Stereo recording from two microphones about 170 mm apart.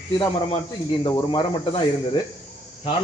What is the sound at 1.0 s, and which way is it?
Speech, 25° left (ahead or behind).